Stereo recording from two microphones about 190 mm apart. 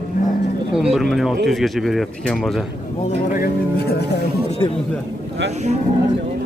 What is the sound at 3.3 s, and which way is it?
Speech, 50° left (ahead or behind).